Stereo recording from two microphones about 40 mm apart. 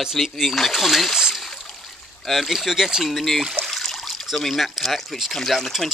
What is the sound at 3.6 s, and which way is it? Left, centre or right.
Trickle, right.